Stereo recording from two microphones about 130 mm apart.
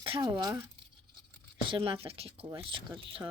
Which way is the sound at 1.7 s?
45° right (ahead or behind).